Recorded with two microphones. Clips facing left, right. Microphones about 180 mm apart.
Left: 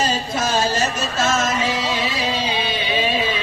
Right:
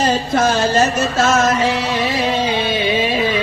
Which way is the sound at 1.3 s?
60° right (ahead or behind).